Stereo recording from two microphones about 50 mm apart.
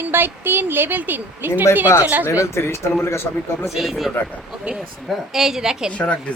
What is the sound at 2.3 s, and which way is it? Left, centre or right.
Speech, left.